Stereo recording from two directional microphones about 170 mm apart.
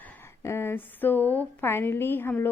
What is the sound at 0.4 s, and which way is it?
A woman's voice, 15° left (ahead or behind).